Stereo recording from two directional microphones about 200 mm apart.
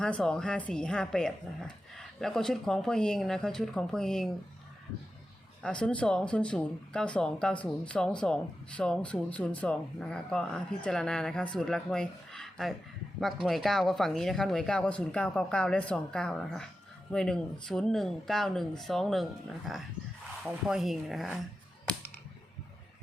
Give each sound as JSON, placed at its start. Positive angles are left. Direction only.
{"t": 0.0, "sound": "speech", "side_deg": 5}
{"t": 5.6, "sound": "speech", "side_deg": 5}